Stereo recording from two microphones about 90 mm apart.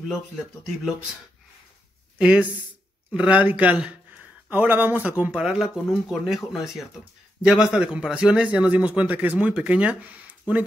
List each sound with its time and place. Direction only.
0.7 s speech: 5° right (ahead or behind)
2.1 s a man's voice: 10° right (ahead or behind)
5.3 s a man's voice: 5° right (ahead or behind)